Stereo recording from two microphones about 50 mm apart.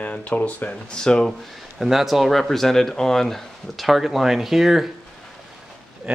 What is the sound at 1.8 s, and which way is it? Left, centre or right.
Speech, centre.